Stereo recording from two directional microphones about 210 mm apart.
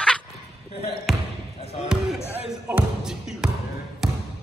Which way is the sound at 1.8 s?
Centre (ahead or behind).